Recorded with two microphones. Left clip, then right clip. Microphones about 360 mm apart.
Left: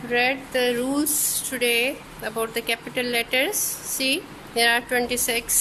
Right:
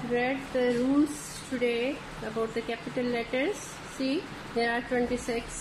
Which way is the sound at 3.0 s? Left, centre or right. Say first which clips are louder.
Left 6 dB; left.